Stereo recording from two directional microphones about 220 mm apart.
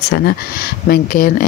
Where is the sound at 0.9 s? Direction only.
40° left (ahead or behind).